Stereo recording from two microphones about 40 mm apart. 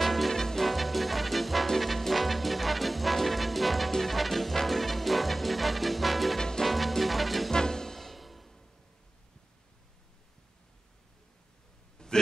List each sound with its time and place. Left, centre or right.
0.0 s music: centre
6.4 s music: centre
6.7 s music: centre
7.5 s music: centre
12.0 s a sound: centre